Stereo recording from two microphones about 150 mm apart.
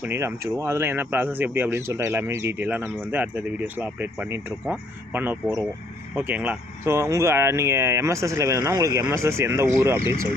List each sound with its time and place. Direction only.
0.0 s speech: 15° right (ahead or behind)